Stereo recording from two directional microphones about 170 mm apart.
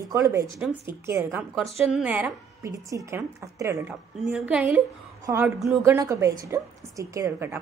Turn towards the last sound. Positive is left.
turn(degrees=-15)  # may be behind; listen again after turning